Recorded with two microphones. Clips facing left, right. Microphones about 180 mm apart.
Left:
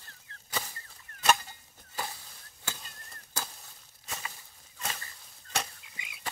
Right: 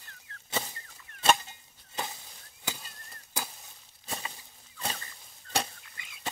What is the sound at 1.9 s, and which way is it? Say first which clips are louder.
Chop: right 1 dB; 20° right (ahead or behind).